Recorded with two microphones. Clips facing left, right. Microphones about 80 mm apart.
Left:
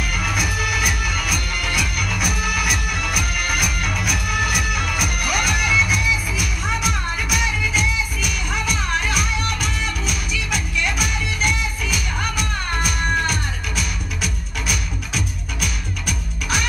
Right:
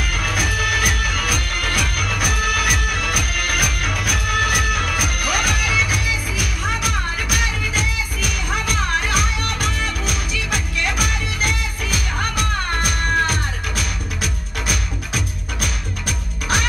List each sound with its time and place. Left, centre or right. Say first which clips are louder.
0.1 s music: right 1 dB; right